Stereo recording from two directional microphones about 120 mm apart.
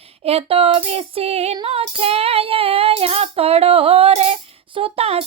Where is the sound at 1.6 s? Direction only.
55° right (ahead or behind).